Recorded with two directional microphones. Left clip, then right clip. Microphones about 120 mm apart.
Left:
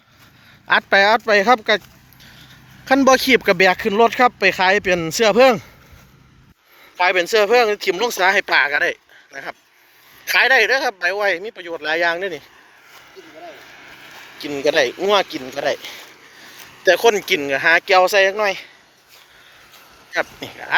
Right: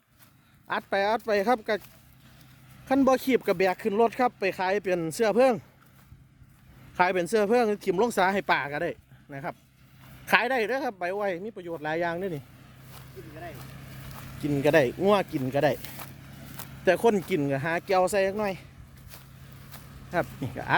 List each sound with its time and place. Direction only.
0.7 s speech: centre (ahead or behind)
2.8 s speech: 5° right (ahead or behind)
6.9 s speech: centre (ahead or behind)
11.9 s speech: 10° right (ahead or behind)
14.5 s speech: 10° right (ahead or behind)
15.4 s speech: 15° right (ahead or behind)